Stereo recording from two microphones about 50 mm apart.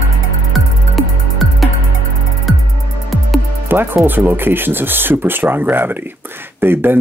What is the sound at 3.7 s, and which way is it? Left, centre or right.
Speech, right.